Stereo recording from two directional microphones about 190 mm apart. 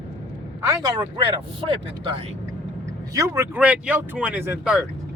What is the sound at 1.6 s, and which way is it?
Speech, 30° right (ahead or behind).